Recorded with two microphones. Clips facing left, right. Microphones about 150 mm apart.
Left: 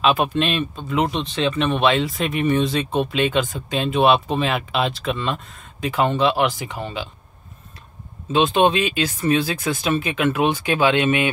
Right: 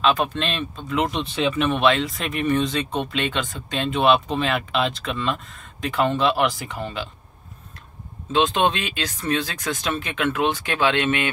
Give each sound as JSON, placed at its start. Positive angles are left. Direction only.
{"t": 0.0, "sound": "speech", "side_deg": 10}
{"t": 8.3, "sound": "speech", "side_deg": 5}